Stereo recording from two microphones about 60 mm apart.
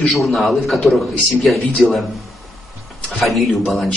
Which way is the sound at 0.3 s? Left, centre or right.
Centre.